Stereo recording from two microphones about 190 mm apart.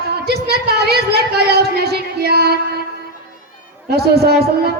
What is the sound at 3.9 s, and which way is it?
Speech, 55° right (ahead or behind).